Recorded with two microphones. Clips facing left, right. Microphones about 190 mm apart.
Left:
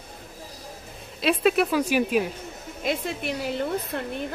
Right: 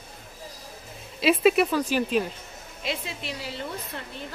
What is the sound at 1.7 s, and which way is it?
Speech, 10° left (ahead or behind).